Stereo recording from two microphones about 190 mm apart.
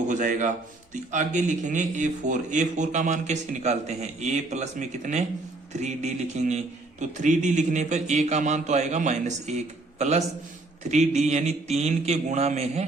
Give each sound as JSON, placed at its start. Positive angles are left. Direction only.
{"t": 0.1, "sound": "a man's voice", "side_deg": -40}